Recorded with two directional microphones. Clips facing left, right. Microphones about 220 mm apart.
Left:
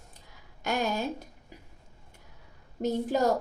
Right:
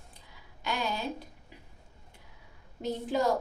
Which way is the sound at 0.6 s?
45° left (ahead or behind).